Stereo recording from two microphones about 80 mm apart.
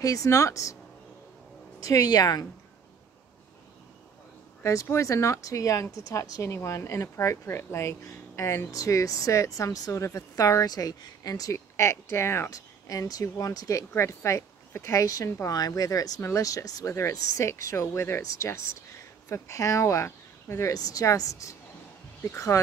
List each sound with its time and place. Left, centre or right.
0.0 s a woman's voice: left
1.8 s a woman's voice: left
4.8 s speech: left
12.5 s a woman's voice: left
16.2 s speech: left